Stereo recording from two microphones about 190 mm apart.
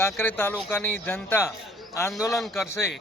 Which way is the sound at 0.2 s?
10° left (ahead or behind).